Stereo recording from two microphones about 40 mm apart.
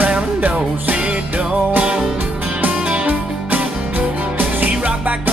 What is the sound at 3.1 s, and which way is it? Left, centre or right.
Music, right.